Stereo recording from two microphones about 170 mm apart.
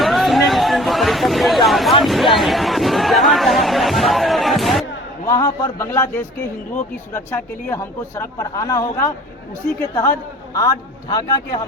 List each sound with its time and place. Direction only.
0.0 s a sound: centre (ahead or behind)
2.0 s chatter: centre (ahead or behind)
5.2 s a man's voice: 20° left (ahead or behind)